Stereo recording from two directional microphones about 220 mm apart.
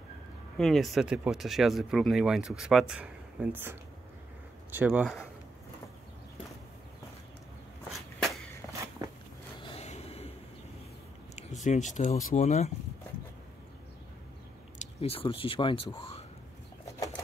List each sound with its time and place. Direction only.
0.6 s speech: centre (ahead or behind)
9.0 s biting: 15° right (ahead or behind)
9.6 s a sound: 25° left (ahead or behind)
11.6 s speech: 35° left (ahead or behind)
14.8 s speech: 25° left (ahead or behind)